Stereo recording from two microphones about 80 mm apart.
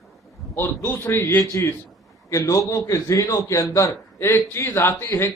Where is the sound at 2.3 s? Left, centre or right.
Left.